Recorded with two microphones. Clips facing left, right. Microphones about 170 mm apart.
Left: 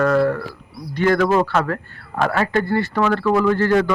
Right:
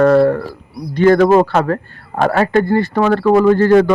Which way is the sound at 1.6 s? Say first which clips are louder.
Right 6 dB; 30° right (ahead or behind).